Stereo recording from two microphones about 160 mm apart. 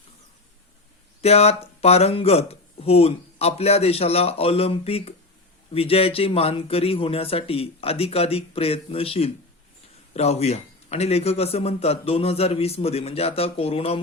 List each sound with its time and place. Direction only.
1.2 s speech: 40° left (ahead or behind)